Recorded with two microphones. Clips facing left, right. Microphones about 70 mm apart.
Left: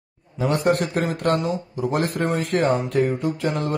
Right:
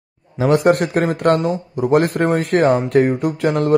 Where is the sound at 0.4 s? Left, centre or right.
Right.